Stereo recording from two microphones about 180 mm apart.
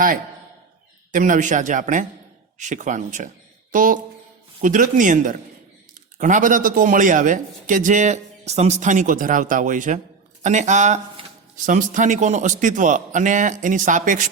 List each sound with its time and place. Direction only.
1.1 s a man's voice: 45° right (ahead or behind)